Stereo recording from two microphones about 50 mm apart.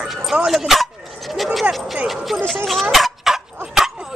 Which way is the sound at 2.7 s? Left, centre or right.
Centre.